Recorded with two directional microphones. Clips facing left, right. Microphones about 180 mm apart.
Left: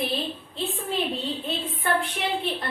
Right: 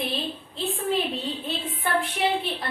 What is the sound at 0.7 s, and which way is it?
A woman's voice, centre (ahead or behind).